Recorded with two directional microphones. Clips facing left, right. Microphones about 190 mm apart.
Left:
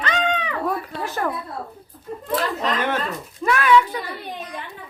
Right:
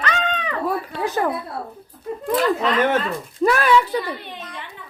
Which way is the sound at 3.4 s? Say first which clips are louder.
Right 1 dB; 35° right (ahead or behind).